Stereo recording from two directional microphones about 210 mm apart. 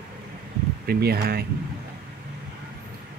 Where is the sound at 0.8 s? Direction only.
45° right (ahead or behind).